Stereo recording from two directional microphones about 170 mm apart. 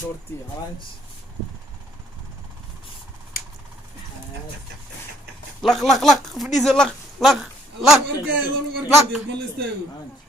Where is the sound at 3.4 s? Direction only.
60° left (ahead or behind).